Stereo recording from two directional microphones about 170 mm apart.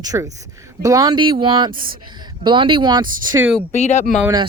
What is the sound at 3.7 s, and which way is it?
Speech, 40° left (ahead or behind).